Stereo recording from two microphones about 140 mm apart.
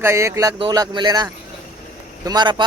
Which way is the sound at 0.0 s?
20° right (ahead or behind).